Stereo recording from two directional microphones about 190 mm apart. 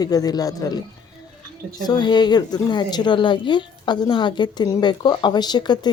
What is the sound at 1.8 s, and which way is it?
A woman's voice, 20° left (ahead or behind).